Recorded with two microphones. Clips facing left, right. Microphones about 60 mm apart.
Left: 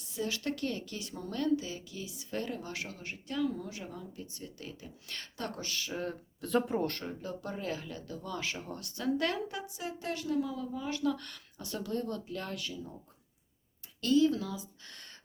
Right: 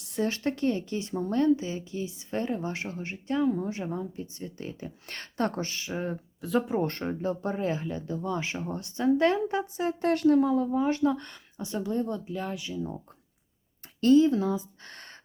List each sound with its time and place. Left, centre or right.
0.2 s speech: right; by 6.1 s centre
6.4 s speech: centre
6.8 s speech: right
10.1 s speech: right; by 12.7 s centre
12.7 s speech: right
14.0 s speech: right